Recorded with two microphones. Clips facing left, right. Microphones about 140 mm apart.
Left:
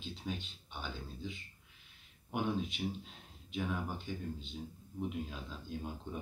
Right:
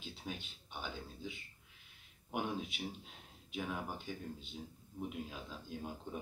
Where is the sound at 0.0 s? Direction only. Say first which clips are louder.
Left 4 dB; 10° right (ahead or behind).